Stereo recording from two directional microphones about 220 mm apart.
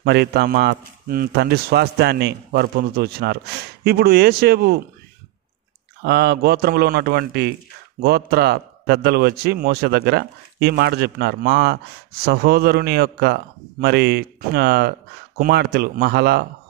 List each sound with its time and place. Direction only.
0.0 s a man's voice: 50° right (ahead or behind)
6.0 s a man's voice: 50° right (ahead or behind)